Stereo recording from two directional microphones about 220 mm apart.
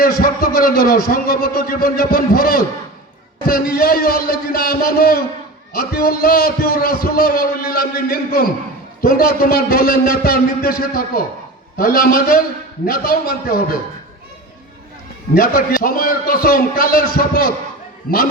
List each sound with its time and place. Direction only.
0.0 s a man's voice: 40° left (ahead or behind)
15.4 s a man's voice: 40° left (ahead or behind)